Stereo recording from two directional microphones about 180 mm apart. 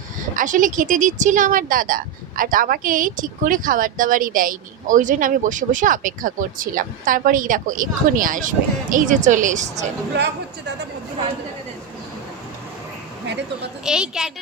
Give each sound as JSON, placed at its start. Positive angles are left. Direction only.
{"t": 0.3, "sound": "speech", "side_deg": -45}
{"t": 13.8, "sound": "speech", "side_deg": -5}